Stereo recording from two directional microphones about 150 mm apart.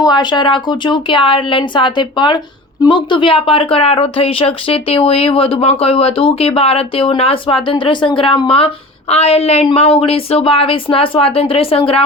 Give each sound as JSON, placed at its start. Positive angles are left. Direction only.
{"t": 0.0, "sound": "speech", "side_deg": 30}